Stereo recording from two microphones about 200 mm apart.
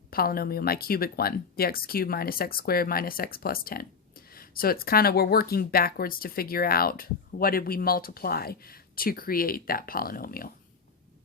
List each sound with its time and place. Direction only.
0.1 s speech: 50° left (ahead or behind)